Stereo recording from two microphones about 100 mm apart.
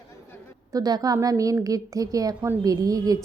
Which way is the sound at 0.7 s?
40° right (ahead or behind).